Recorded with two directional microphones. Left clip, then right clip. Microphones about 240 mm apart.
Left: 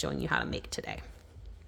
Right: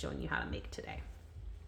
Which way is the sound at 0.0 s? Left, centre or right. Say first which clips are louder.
Left 7 dB; left.